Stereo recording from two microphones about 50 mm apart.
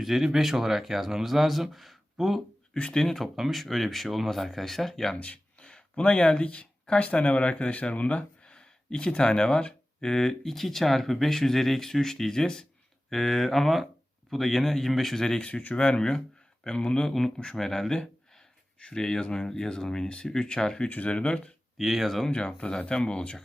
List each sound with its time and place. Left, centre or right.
0.0 s speech: centre
2.7 s speech: centre
3.3 s speech: centre
5.1 s a sound: left
5.7 s speech: centre
10.0 s speech: centre
15.4 s speech: centre
20.9 s speech: left
21.8 s speech: centre
22.3 s speech: left